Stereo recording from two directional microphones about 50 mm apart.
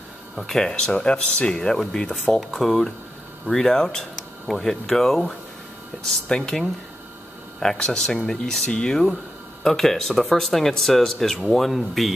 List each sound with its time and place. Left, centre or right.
0.4 s speech: centre
0.7 s speech: centre
7.6 s speech: centre